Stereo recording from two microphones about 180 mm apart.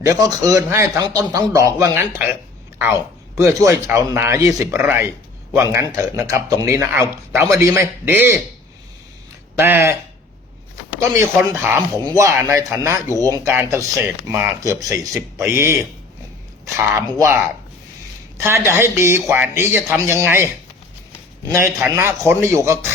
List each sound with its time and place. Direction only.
0.0 s speech: 20° right (ahead or behind)
9.6 s speech: 10° right (ahead or behind)
11.2 s speech: 10° right (ahead or behind)
18.4 s speech: 15° right (ahead or behind)
21.8 s speech: 10° right (ahead or behind)